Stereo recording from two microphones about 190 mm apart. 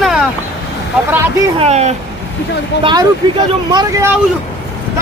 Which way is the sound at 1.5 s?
35° right (ahead or behind).